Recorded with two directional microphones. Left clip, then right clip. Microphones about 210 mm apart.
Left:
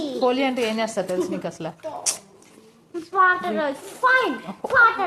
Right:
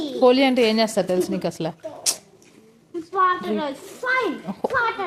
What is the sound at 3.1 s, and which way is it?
A woman's voice, 10° right (ahead or behind).